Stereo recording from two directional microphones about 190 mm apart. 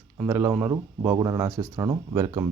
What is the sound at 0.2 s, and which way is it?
Speech, 10° right (ahead or behind).